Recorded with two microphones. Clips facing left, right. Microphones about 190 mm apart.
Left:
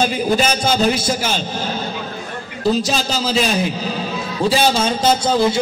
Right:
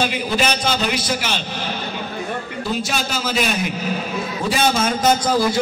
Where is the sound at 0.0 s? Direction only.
40° left (ahead or behind).